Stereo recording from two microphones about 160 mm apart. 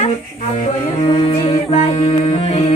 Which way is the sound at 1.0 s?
35° left (ahead or behind).